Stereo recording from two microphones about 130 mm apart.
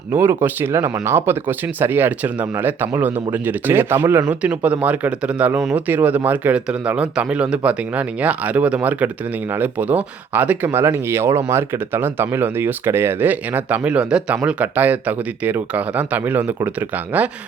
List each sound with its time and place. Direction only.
0.1 s speech: 15° right (ahead or behind)